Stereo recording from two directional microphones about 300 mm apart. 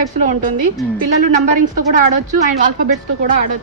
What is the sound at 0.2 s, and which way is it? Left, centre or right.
Speech, right.